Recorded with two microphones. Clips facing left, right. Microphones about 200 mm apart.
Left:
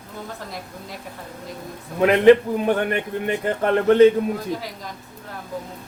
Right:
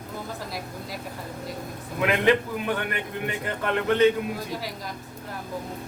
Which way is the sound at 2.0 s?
40° left (ahead or behind).